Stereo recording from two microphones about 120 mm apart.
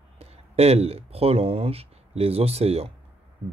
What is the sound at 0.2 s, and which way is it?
Speech, 60° right (ahead or behind).